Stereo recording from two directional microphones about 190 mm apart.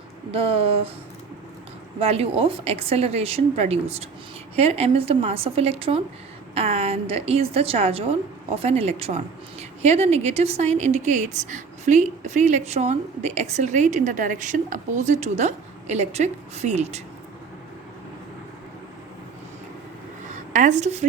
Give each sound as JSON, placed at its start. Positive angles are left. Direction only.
{"t": 0.3, "sound": "a woman's voice", "side_deg": -30}
{"t": 2.0, "sound": "a woman's voice", "side_deg": -30}
{"t": 20.3, "sound": "a woman's voice", "side_deg": -40}